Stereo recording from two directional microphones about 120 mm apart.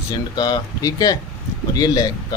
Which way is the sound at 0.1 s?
35° left (ahead or behind).